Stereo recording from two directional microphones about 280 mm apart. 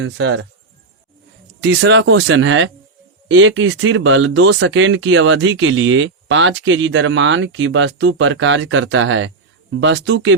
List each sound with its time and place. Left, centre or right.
0.0 s speech: right
1.6 s speech: right